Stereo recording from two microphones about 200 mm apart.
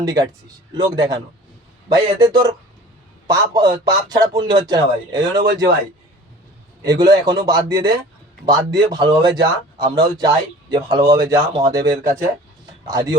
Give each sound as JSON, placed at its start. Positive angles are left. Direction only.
{"t": 0.0, "sound": "a man's voice", "side_deg": -20}
{"t": 6.8, "sound": "a man's voice", "side_deg": -20}